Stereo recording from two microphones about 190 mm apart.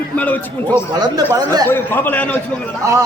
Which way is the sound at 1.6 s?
10° left (ahead or behind).